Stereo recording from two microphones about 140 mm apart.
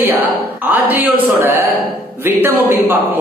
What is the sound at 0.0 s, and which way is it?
A man's voice, 15° right (ahead or behind).